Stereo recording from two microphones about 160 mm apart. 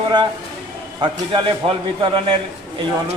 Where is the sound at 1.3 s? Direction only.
30° right (ahead or behind).